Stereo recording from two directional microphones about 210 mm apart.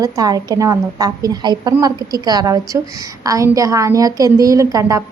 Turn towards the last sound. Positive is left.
turn(degrees=-15)  # may be behind; listen again after turning